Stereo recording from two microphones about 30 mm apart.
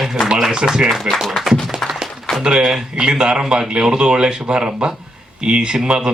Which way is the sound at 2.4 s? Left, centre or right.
Centre.